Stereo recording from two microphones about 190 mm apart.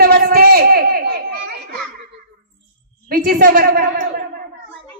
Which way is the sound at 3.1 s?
50° right (ahead or behind).